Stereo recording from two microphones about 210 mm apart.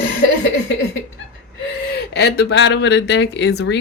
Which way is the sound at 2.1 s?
50° left (ahead or behind).